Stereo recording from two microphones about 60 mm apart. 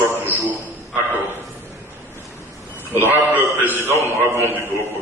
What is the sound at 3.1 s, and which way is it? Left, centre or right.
Speech, right.